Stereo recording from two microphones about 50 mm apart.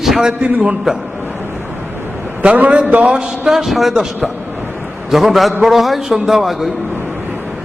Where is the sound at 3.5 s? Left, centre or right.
Centre.